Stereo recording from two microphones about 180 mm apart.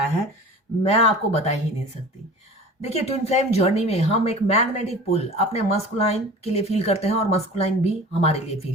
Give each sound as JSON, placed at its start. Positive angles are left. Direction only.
{"t": 0.8, "sound": "speech", "side_deg": 35}
{"t": 2.8, "sound": "speech", "side_deg": 35}